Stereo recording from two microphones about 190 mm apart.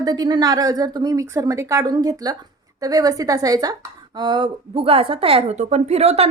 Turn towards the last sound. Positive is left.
turn(degrees=-35)  # may be behind; listen again after turning